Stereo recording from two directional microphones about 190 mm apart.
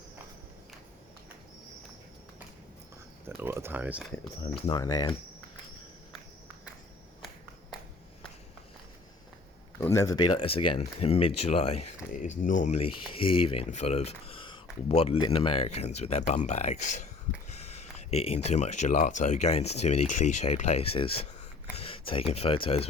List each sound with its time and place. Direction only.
3.2 s speech: 10° right (ahead or behind)
4.7 s speech: 20° left (ahead or behind)
9.8 s speech: 15° left (ahead or behind); by 17.0 s 40° left (ahead or behind)
18.1 s speech: 30° left (ahead or behind)